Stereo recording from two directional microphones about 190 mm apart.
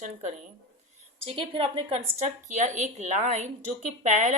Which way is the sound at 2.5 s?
40° right (ahead or behind).